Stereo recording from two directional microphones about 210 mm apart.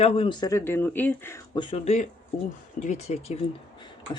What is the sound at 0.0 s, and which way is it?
Speech, 25° left (ahead or behind).